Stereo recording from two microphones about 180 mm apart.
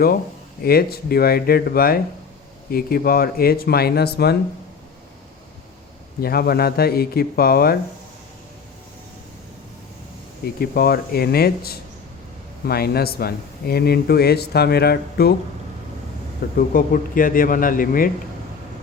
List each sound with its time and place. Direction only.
0.6 s speech: 60° left (ahead or behind)
6.2 s speech: 60° left (ahead or behind)
10.4 s speech: 60° left (ahead or behind)
16.6 s a man's voice: 50° left (ahead or behind)